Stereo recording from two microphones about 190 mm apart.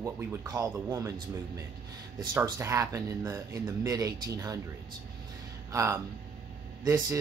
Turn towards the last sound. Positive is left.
turn(degrees=-15)  # may be behind; listen again after turning